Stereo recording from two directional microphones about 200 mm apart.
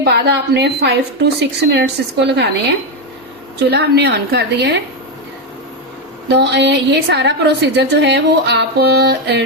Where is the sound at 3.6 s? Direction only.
55° right (ahead or behind).